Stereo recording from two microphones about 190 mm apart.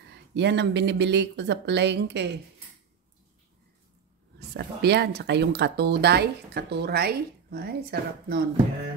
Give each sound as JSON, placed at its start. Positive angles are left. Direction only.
{"t": 0.1, "sound": "speech", "side_deg": -65}
{"t": 4.4, "sound": "speech", "side_deg": -60}